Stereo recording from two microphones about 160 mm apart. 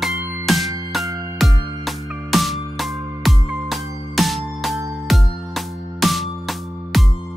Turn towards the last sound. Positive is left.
turn(degrees=0)  # may be behind; listen again after turning